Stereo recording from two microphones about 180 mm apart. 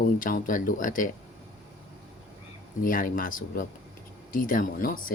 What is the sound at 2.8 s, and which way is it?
Speech, 50° left (ahead or behind).